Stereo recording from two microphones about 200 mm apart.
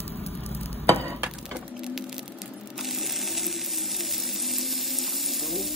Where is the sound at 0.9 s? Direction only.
10° left (ahead or behind).